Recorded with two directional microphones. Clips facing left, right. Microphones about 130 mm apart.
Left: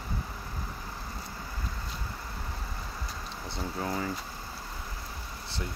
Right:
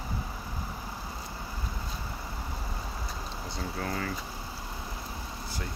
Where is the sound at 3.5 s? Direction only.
20° left (ahead or behind).